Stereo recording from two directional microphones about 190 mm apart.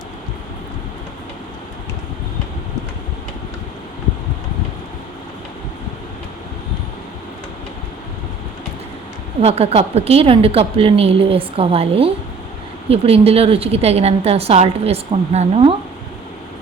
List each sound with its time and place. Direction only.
9.4 s a woman's voice: 30° right (ahead or behind)